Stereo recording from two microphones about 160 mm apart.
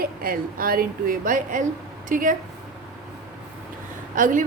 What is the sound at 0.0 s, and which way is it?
A woman's voice, 65° right (ahead or behind).